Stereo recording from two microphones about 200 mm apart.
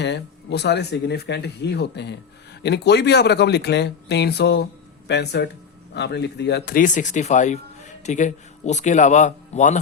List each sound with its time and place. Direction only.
0.0 s speech: 55° left (ahead or behind); by 9.7 s 35° left (ahead or behind)